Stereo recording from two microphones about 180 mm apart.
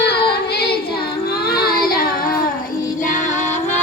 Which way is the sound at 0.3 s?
65° left (ahead or behind).